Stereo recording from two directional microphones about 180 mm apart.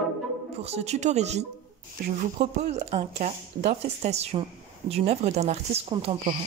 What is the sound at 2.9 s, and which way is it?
Speech, 40° right (ahead or behind).